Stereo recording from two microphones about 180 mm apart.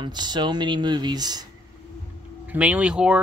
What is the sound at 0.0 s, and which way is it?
Speech, 25° right (ahead or behind).